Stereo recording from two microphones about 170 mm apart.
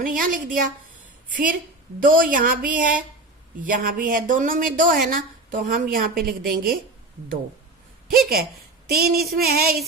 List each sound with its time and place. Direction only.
0.0 s a woman's voice: 55° right (ahead or behind)
8.9 s a woman's voice: 65° right (ahead or behind)